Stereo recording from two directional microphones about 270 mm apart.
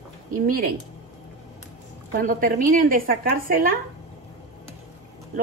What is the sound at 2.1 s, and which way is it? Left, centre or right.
A woman's voice, right.